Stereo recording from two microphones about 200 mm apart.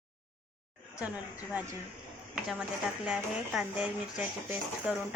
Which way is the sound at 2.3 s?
5° right (ahead or behind).